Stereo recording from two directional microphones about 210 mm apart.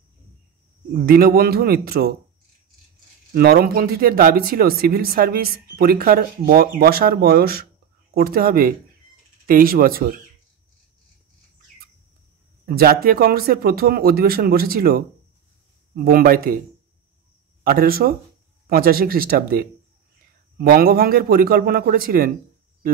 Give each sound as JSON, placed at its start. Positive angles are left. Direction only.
{"t": 1.0, "sound": "speech", "side_deg": -45}
{"t": 3.3, "sound": "speech", "side_deg": -45}
{"t": 12.6, "sound": "speech", "side_deg": -45}
{"t": 17.6, "sound": "speech", "side_deg": -45}